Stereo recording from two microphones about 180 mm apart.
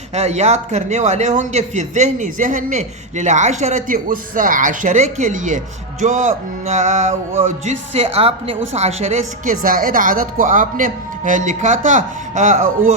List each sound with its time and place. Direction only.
0.1 s a man's voice: 40° right (ahead or behind)
9.6 s speech: 50° right (ahead or behind)